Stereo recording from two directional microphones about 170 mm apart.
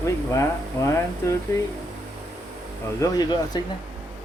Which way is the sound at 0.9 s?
15° left (ahead or behind).